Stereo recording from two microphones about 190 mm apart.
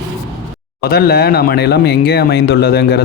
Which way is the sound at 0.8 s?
55° left (ahead or behind).